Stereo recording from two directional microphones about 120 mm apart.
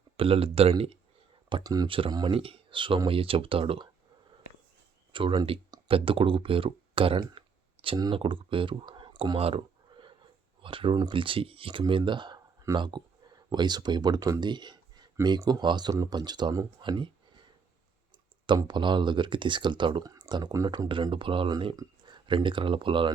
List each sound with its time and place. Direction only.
0.2 s speech: 50° right (ahead or behind)
1.6 s speech: 30° right (ahead or behind)
1.9 s speech: 45° right (ahead or behind)
5.1 s speech: 45° right (ahead or behind)
10.6 s speech: 45° right (ahead or behind)
18.4 s speech: 40° right (ahead or behind)